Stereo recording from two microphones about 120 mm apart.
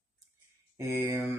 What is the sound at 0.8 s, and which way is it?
Speech, 25° right (ahead or behind).